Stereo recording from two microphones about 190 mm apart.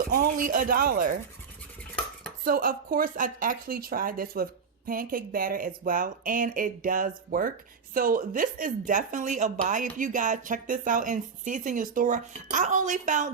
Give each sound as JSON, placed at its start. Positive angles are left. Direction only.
{"t": 0.1, "sound": "speech", "side_deg": -50}
{"t": 2.4, "sound": "speech", "side_deg": -50}